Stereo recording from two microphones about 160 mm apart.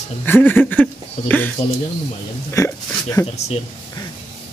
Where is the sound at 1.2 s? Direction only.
45° left (ahead or behind).